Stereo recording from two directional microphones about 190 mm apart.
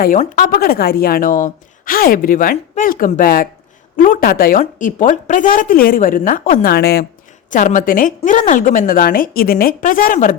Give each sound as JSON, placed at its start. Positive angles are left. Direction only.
{"t": 0.2, "sound": "a woman's voice", "side_deg": 45}
{"t": 7.5, "sound": "a woman's voice", "side_deg": 45}